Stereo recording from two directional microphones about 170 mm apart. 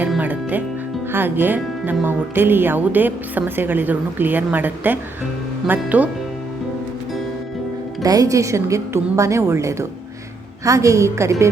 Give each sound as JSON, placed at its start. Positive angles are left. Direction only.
{"t": 0.2, "sound": "music", "side_deg": -10}
{"t": 1.1, "sound": "speech", "side_deg": -10}
{"t": 8.0, "sound": "speech", "side_deg": -20}